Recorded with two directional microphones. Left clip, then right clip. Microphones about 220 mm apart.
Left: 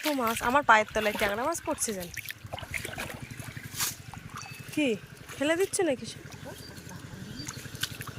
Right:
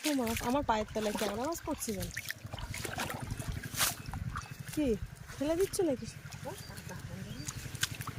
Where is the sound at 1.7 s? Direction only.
20° left (ahead or behind).